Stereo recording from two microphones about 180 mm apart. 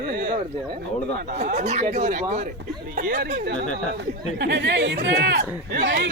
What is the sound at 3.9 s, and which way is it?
Speech, 70° right (ahead or behind).